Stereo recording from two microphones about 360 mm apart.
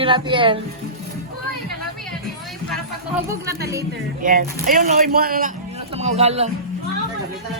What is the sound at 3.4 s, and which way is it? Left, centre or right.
A man's voice, right.